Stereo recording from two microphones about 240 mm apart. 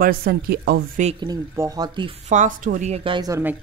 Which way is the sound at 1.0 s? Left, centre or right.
Centre.